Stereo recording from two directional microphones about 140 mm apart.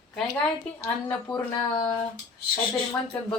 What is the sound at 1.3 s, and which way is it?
Speech, 30° left (ahead or behind).